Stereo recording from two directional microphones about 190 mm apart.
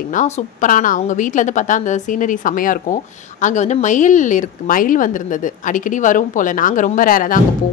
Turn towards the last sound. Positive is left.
turn(degrees=45)  # may be behind; listen again after turning